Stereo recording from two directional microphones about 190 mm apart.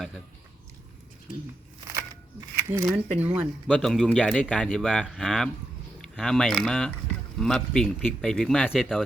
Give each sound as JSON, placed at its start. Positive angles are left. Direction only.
{"t": 2.6, "sound": "speech", "side_deg": -15}